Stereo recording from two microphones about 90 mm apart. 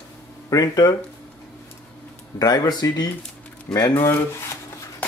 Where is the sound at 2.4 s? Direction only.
50° left (ahead or behind).